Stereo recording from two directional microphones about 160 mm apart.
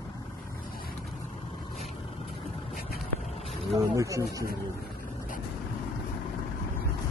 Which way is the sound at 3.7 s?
20° right (ahead or behind).